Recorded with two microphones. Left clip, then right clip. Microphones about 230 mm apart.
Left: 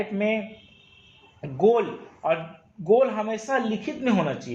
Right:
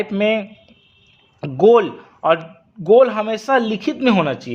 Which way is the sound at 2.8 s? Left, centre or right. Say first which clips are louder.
Right 8 dB; right.